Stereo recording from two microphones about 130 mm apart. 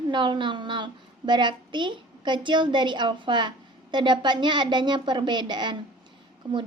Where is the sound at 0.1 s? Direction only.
35° right (ahead or behind).